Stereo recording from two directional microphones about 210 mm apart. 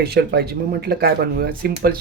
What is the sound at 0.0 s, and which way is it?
Speech, 50° right (ahead or behind).